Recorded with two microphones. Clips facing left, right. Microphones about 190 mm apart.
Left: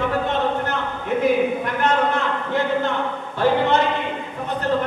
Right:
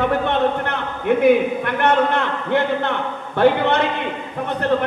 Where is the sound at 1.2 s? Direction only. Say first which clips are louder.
Right 3 dB; 65° right (ahead or behind).